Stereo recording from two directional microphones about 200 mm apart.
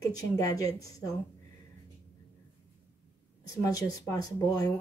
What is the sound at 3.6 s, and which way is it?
Speech, 15° left (ahead or behind).